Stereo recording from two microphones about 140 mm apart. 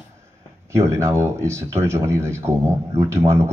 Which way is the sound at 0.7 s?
20° right (ahead or behind).